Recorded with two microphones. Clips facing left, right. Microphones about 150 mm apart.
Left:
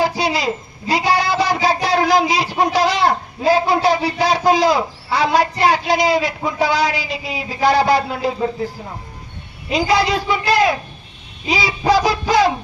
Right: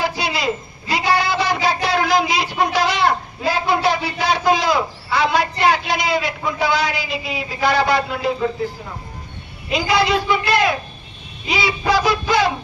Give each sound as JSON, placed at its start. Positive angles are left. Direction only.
{"t": 0.0, "sound": "a woman's voice", "side_deg": 35}
{"t": 9.7, "sound": "a man's voice", "side_deg": 40}